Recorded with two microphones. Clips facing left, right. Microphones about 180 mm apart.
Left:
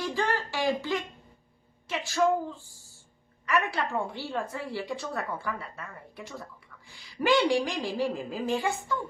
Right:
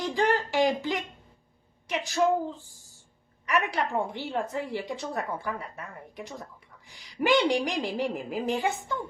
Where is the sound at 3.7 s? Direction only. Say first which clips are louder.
Right 2 dB; 20° right (ahead or behind).